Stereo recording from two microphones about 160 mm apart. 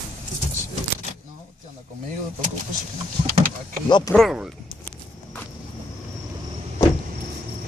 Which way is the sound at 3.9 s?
30° left (ahead or behind).